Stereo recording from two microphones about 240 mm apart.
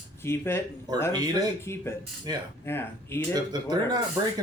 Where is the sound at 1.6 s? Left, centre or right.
Centre.